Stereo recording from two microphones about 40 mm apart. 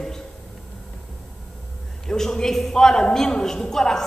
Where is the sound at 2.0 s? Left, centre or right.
Centre.